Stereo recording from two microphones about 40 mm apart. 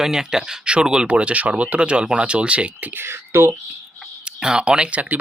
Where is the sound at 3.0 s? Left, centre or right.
Right.